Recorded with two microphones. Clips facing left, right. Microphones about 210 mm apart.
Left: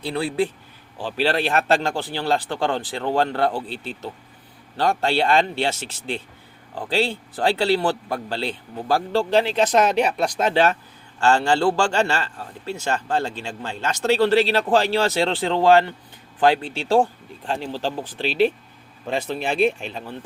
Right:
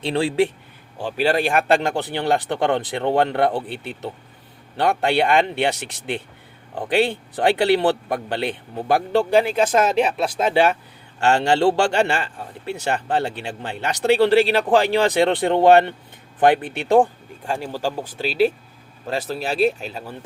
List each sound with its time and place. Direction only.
0.0 s speech: 30° right (ahead or behind)
0.3 s speech: 75° right (ahead or behind)
1.2 s a man's voice: 10° right (ahead or behind)